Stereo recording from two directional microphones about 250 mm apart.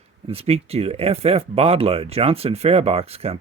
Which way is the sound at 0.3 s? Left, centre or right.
Right.